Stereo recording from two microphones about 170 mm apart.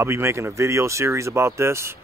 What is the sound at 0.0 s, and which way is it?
Speech, 15° right (ahead or behind).